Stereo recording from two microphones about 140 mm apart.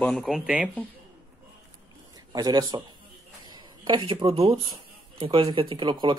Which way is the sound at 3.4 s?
30° right (ahead or behind).